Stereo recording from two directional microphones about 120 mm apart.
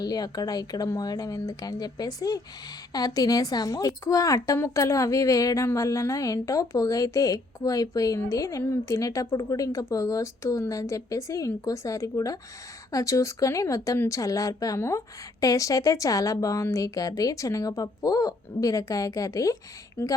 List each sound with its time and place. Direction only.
0.0 s speech: 35° left (ahead or behind)
20.0 s a woman's voice: 15° left (ahead or behind)